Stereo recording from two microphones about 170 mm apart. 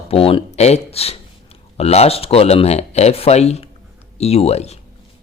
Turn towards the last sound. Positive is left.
turn(degrees=40)  # may be behind; listen again after turning